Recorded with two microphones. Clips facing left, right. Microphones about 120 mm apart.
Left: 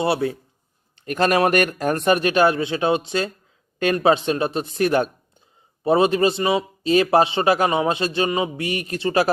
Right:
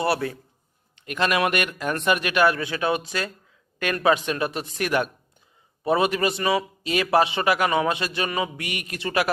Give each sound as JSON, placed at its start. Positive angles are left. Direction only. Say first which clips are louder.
{"t": 0.0, "sound": "a man's voice", "louder": "left 3 dB", "side_deg": 25}
{"t": 0.9, "sound": "a man's voice", "louder": "left 5 dB", "side_deg": 40}